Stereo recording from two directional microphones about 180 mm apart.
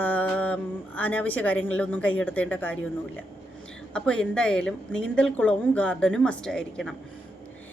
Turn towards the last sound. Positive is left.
turn(degrees=5)  # may be behind; listen again after turning